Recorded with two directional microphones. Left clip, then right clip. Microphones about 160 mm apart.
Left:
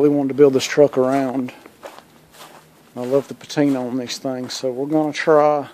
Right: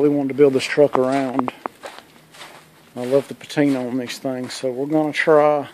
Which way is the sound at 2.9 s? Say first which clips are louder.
Right 1 dB; 5° left (ahead or behind).